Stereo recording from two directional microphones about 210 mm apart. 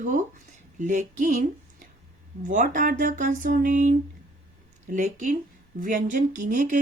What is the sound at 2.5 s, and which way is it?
Speech, 40° right (ahead or behind).